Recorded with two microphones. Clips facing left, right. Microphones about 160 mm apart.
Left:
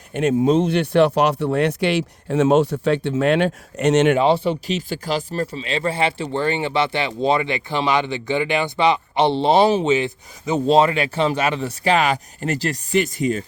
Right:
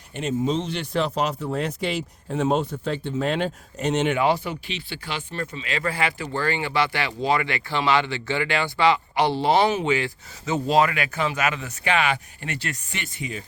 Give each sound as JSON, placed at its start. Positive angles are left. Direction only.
{"t": 0.1, "sound": "speech", "side_deg": 55}
{"t": 4.2, "sound": "speech", "side_deg": 25}
{"t": 4.7, "sound": "speech", "side_deg": 45}